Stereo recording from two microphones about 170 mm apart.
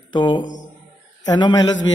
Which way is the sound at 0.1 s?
25° left (ahead or behind).